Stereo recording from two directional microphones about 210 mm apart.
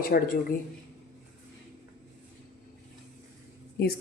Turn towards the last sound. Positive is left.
turn(degrees=45)  # may be behind; listen again after turning